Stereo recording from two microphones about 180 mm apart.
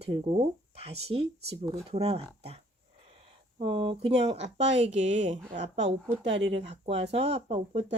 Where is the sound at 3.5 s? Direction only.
30° right (ahead or behind).